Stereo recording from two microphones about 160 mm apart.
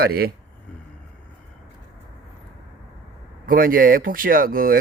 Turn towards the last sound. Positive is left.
turn(degrees=-65)  # may be behind; listen again after turning